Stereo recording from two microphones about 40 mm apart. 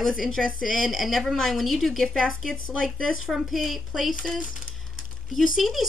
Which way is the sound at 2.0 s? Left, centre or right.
Centre.